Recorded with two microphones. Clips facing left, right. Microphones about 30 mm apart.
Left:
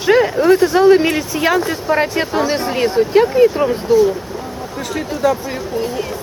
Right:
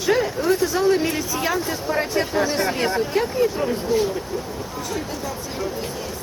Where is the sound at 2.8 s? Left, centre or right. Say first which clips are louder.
Left 8 dB; left.